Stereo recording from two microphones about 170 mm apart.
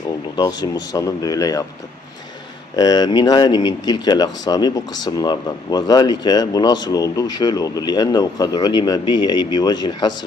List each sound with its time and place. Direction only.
0.3 s speech: 25° left (ahead or behind)
2.7 s speech: 25° left (ahead or behind)